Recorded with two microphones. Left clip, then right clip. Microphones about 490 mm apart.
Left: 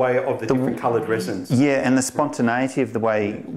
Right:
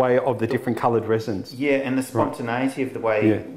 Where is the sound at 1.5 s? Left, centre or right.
Left.